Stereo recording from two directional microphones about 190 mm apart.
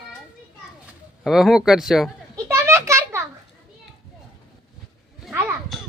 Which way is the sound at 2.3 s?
15° right (ahead or behind).